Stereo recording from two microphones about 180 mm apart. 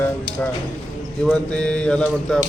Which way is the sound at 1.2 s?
5° left (ahead or behind).